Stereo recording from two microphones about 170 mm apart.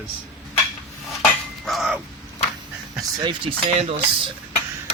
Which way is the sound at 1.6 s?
Centre (ahead or behind).